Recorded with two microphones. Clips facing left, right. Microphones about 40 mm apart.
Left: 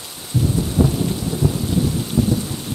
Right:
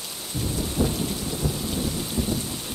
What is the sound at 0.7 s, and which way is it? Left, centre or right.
Rain, centre.